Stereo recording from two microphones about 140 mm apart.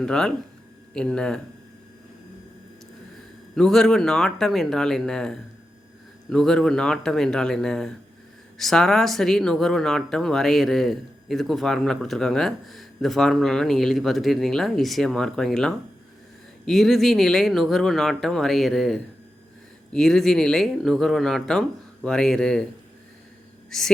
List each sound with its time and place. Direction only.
0.0 s speech: 5° left (ahead or behind)
3.5 s speech: 5° left (ahead or behind)
23.6 s speech: 5° left (ahead or behind)